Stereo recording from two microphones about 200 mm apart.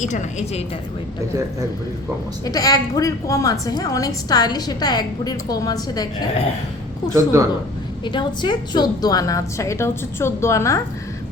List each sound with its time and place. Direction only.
0.0 s a woman's voice: 35° left (ahead or behind)
2.4 s a woman's voice: 20° left (ahead or behind)
7.1 s a woman's voice: 15° right (ahead or behind)
8.0 s a woman's voice: 25° left (ahead or behind)